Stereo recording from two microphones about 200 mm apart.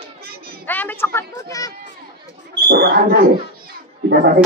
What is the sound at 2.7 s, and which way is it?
A man's voice, 50° right (ahead or behind).